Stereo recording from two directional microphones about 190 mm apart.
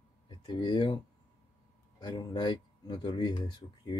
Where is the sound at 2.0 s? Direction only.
20° left (ahead or behind).